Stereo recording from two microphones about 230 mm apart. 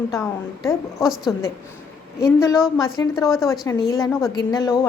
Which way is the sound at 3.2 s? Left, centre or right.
Centre.